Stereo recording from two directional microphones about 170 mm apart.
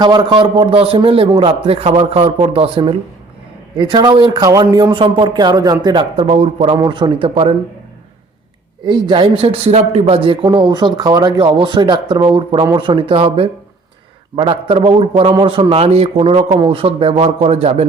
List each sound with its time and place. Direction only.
0.0 s a man's voice: 25° right (ahead or behind)
6.3 s a man's voice: 35° right (ahead or behind)
6.7 s a man's voice: 25° right (ahead or behind)
8.9 s a man's voice: 30° right (ahead or behind)